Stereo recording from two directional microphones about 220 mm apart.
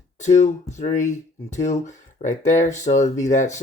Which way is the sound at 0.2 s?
30° left (ahead or behind).